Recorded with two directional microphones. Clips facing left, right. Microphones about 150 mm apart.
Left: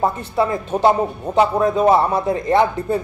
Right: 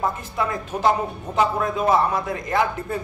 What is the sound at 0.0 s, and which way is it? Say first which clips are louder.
A man's voice: left 6 dB; 30° left (ahead or behind).